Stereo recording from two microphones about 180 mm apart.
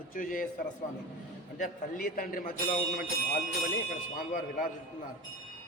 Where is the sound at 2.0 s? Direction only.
55° left (ahead or behind).